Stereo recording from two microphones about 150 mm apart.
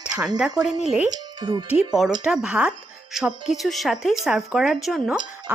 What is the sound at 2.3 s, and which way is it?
Speech, 5° right (ahead or behind).